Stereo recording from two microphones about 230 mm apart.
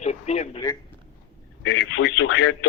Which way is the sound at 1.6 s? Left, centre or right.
Left.